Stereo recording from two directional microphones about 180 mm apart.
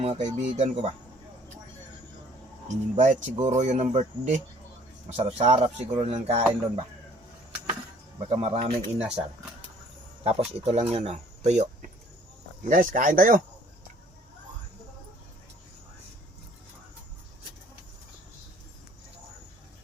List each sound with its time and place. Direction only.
0.0 s speech: 30° right (ahead or behind)
2.6 s speech: 40° right (ahead or behind)
8.2 s speech: 40° right (ahead or behind)
10.2 s speech: 35° right (ahead or behind)